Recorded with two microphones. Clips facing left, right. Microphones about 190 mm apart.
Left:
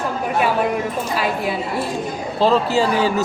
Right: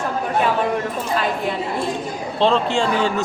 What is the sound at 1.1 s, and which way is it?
A woman's voice, 5° left (ahead or behind).